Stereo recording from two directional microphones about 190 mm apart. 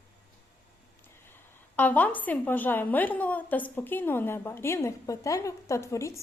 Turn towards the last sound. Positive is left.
turn(degrees=15)  # may be behind; listen again after turning